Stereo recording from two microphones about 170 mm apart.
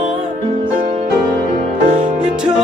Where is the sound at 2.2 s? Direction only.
5° right (ahead or behind).